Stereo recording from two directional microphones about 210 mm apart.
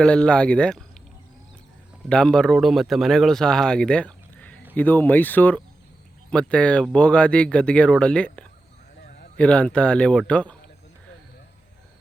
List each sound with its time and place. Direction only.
0.0 s speech: 5° left (ahead or behind)
2.0 s speech: 5° left (ahead or behind)
9.0 s a sound: 45° left (ahead or behind)
9.4 s speech: 5° left (ahead or behind)